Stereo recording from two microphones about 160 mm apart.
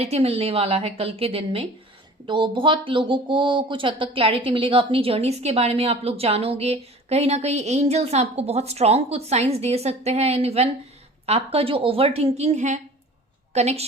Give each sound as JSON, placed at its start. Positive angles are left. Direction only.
{"t": 0.0, "sound": "a woman's voice", "side_deg": -40}